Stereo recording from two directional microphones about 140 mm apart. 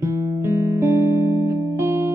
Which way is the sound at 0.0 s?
20° right (ahead or behind).